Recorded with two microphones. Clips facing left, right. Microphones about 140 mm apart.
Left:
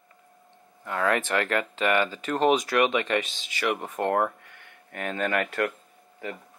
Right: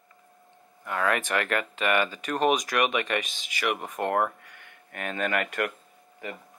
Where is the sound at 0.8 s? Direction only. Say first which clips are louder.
Left 1 dB; 15° right (ahead or behind).